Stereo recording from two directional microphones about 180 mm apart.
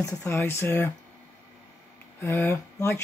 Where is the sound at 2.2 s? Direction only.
15° left (ahead or behind).